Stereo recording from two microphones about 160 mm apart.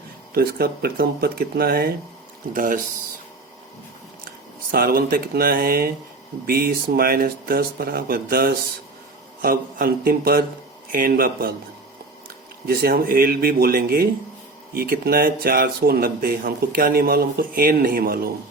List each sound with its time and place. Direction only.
0.3 s speech: 70° right (ahead or behind)
2.5 s a man's voice: 55° right (ahead or behind)
4.7 s a man's voice: 70° right (ahead or behind)
12.6 s speech: 70° right (ahead or behind)